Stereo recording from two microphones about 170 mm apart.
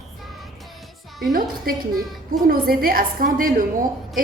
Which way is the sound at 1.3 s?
55° right (ahead or behind).